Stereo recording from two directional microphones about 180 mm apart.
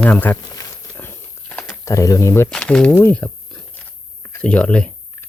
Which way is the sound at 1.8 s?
15° left (ahead or behind).